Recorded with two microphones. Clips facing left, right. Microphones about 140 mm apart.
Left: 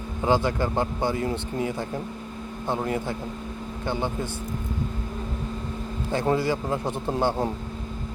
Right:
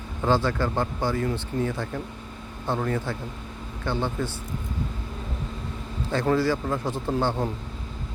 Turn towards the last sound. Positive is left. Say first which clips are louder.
# left 1 dB
turn(degrees=15)  # may be behind; listen again after turning